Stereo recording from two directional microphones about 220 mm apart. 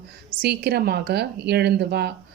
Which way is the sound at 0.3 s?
45° right (ahead or behind).